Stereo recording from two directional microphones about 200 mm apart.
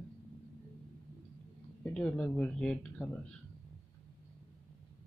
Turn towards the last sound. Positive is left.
turn(degrees=5)  # may be behind; listen again after turning